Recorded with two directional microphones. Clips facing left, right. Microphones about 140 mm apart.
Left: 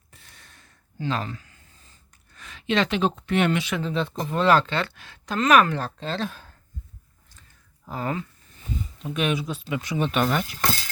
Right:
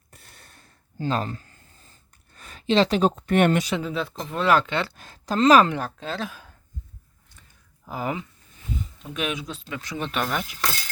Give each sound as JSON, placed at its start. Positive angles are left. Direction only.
{"t": 0.6, "sound": "a sound", "side_deg": -40}
{"t": 2.3, "sound": "speech", "side_deg": -40}
{"t": 3.8, "sound": "speech", "side_deg": -5}
{"t": 4.1, "sound": "speech", "side_deg": 5}
{"t": 4.9, "sound": "speech", "side_deg": -40}
{"t": 5.7, "sound": "speech", "side_deg": -10}
{"t": 7.9, "sound": "speech", "side_deg": -10}
{"t": 9.1, "sound": "speech", "side_deg": 0}